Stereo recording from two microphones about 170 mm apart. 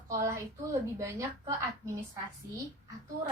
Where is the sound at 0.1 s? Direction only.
15° right (ahead or behind).